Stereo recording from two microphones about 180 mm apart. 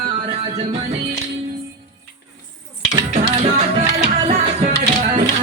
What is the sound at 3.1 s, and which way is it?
Music, 40° right (ahead or behind).